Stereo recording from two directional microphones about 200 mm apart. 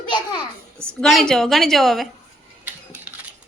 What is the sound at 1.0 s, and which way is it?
A woman's voice, centre (ahead or behind).